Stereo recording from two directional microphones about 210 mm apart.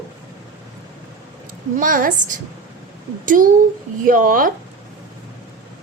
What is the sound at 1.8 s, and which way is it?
A woman's voice, 40° right (ahead or behind).